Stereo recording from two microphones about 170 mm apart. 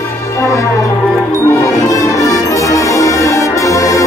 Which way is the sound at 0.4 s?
15° left (ahead or behind).